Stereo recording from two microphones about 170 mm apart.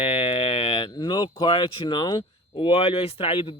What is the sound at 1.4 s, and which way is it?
Speech, 30° left (ahead or behind).